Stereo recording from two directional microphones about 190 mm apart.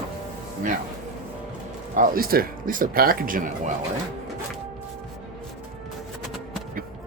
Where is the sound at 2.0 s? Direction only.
50° right (ahead or behind).